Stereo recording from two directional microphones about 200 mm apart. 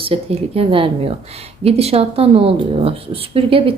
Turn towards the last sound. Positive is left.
turn(degrees=-30)  # may be behind; listen again after turning